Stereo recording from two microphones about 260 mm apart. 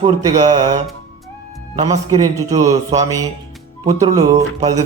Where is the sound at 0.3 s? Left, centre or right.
Right.